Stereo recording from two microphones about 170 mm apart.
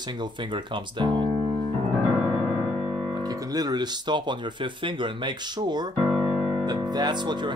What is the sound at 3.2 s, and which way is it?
Speech, 20° right (ahead or behind).